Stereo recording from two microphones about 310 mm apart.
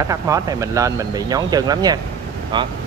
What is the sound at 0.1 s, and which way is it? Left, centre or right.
Speech, centre.